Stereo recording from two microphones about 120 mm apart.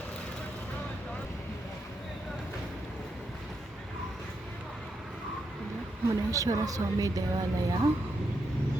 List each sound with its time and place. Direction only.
6.1 s speech: 30° right (ahead or behind)